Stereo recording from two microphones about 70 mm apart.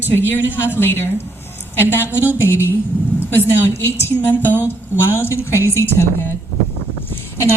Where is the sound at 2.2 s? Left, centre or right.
Right.